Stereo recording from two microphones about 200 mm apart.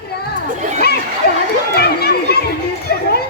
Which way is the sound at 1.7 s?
50° left (ahead or behind).